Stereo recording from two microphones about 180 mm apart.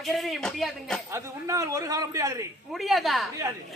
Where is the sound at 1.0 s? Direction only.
15° right (ahead or behind).